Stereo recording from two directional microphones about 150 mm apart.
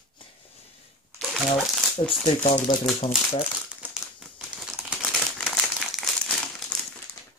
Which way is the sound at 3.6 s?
5° right (ahead or behind).